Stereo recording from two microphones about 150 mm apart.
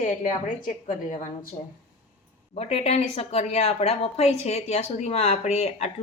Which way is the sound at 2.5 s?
45° left (ahead or behind).